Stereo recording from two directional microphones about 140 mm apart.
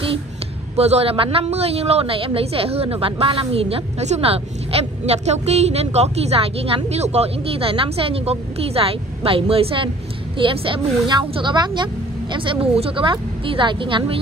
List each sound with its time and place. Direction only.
0.7 s a man's voice: 50° right (ahead or behind)